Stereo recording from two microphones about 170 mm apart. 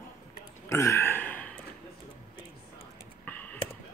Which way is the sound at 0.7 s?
15° left (ahead or behind).